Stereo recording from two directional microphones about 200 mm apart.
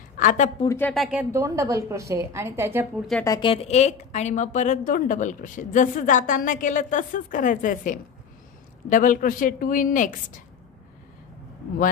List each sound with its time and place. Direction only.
0.2 s a woman's voice: 40° left (ahead or behind)
0.7 s speech: 5° left (ahead or behind)
1.3 s a woman's voice: 15° right (ahead or behind)
3.3 s a woman's voice: 25° left (ahead or behind); by 10.4 s 40° left (ahead or behind)